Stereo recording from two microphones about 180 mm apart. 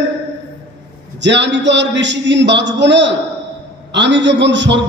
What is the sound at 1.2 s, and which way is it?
A man's voice, 80° right.